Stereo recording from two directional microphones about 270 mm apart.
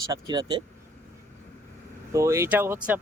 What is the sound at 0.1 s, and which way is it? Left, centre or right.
Speech, centre.